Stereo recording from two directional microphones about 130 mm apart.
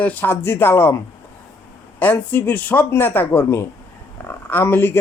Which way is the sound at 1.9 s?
15° left (ahead or behind).